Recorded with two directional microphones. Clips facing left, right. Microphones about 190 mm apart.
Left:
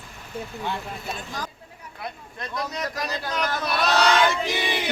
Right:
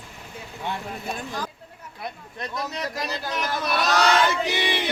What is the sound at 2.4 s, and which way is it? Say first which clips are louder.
Speech: even; 25° right (ahead or behind).